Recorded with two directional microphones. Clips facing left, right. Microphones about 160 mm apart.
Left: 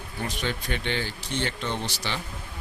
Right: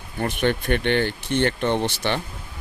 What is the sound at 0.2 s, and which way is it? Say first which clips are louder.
Speech: right 8 dB; 55° right (ahead or behind).